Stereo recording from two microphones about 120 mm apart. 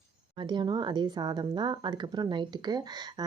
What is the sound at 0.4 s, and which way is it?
A woman's voice, 40° right (ahead or behind).